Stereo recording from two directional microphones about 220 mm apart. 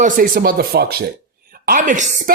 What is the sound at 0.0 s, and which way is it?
Speech, 40° right (ahead or behind).